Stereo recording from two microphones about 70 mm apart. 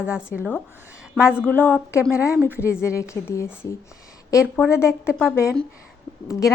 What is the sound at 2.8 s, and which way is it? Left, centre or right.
A woman's voice, left.